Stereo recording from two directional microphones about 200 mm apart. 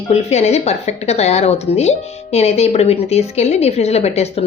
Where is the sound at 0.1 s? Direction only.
35° left (ahead or behind).